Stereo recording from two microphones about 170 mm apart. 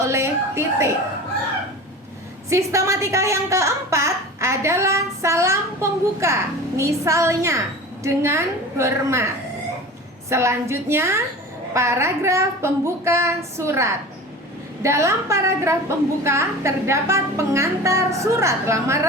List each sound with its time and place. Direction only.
0.0 s a woman's voice: 15° right (ahead or behind)
2.5 s a woman's voice: 15° right (ahead or behind)
10.2 s a woman's voice: 15° right (ahead or behind)